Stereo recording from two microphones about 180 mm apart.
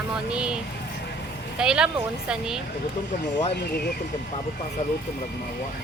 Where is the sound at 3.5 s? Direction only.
65° left (ahead or behind).